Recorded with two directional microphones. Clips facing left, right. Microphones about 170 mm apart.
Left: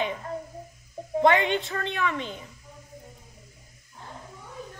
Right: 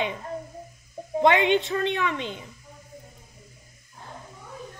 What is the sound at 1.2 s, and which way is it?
A woman's voice, 20° right (ahead or behind).